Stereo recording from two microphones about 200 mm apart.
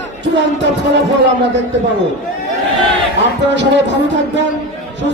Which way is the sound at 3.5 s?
65° right (ahead or behind).